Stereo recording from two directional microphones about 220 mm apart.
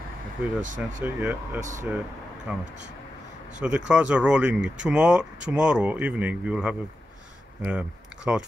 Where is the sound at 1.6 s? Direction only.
35° right (ahead or behind).